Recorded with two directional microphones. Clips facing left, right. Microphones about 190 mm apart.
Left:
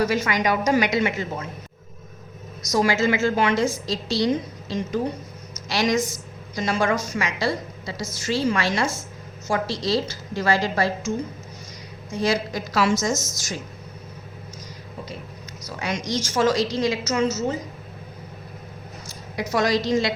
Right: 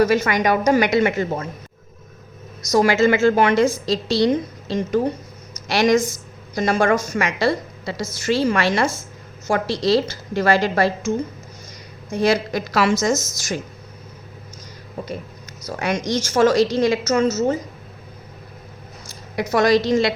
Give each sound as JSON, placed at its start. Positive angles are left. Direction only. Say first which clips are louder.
{"t": 0.0, "sound": "a woman's voice", "louder": "right 5 dB", "side_deg": -55}
{"t": 2.7, "sound": "a woman's voice", "louder": "right 5 dB", "side_deg": -60}
{"t": 5.6, "sound": "a woman's voice", "louder": "right 5 dB", "side_deg": -55}
{"t": 12.1, "sound": "a woman's voice", "louder": "right 5 dB", "side_deg": -60}
{"t": 15.8, "sound": "a woman's voice", "louder": "right 5 dB", "side_deg": -55}
{"t": 19.4, "sound": "a woman's voice", "louder": "right 5 dB", "side_deg": -60}